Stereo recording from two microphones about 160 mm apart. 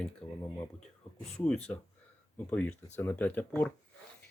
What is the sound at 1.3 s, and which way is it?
Speech, 5° left (ahead or behind).